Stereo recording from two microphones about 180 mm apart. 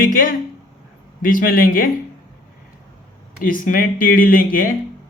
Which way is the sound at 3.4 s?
50° left (ahead or behind).